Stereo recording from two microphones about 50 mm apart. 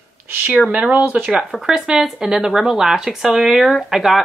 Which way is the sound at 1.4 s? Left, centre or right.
Centre.